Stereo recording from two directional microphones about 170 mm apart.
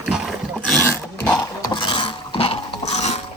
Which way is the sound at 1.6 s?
30° left (ahead or behind).